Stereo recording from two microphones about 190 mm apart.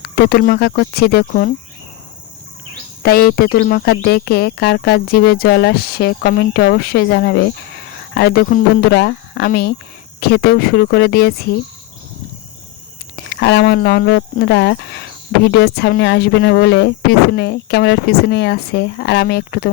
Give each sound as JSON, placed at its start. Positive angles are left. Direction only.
{"t": 0.0, "sound": "speech", "side_deg": 55}
{"t": 3.0, "sound": "speech", "side_deg": 55}
{"t": 13.3, "sound": "speech", "side_deg": 60}